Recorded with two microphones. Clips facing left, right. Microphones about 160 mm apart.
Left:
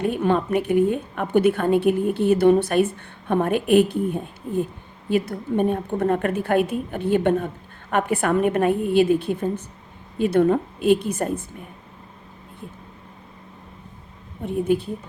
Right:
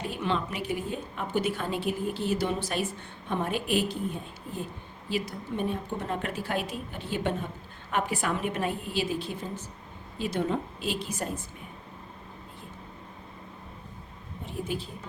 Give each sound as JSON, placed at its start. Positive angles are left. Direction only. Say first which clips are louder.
{"t": 0.0, "sound": "a woman's voice", "louder": "left 9 dB", "side_deg": 50}
{"t": 14.4, "sound": "a woman's voice", "louder": "left 13 dB", "side_deg": 55}